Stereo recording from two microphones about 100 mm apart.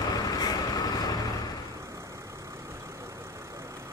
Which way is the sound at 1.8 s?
30° right (ahead or behind).